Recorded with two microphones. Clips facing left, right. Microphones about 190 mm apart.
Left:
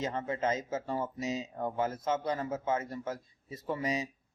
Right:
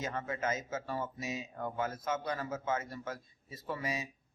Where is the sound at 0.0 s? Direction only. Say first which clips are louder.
Left 4 dB; 25° left (ahead or behind).